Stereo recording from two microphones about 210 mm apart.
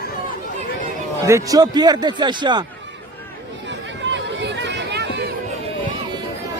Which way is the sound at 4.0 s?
60° right (ahead or behind).